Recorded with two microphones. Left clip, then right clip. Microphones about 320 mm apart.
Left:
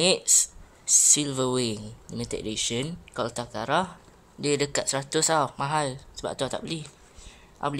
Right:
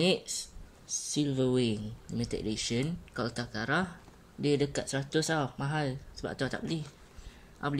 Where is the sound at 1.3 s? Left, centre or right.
Centre.